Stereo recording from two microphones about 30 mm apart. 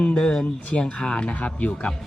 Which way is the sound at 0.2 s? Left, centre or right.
Left.